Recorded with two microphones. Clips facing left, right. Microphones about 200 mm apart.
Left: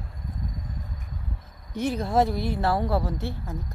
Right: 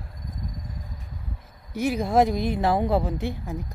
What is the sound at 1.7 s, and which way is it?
A woman's voice, 10° right (ahead or behind).